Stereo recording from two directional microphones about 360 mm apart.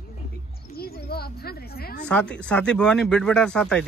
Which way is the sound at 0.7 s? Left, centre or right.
Left.